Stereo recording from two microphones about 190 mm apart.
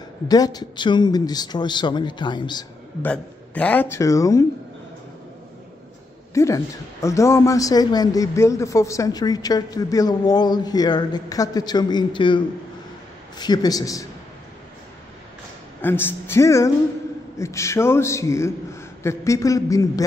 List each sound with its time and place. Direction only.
0.3 s a woman's voice: 20° left (ahead or behind)
3.0 s a man's voice: 5° left (ahead or behind)
6.3 s a woman's voice: 15° left (ahead or behind)
15.8 s a man's voice: 10° left (ahead or behind)